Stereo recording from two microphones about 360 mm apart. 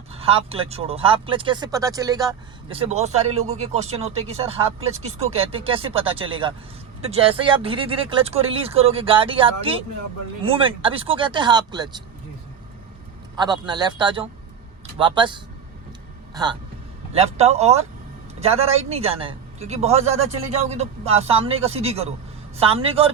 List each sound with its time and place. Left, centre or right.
0.1 s speech: centre
13.3 s speech: centre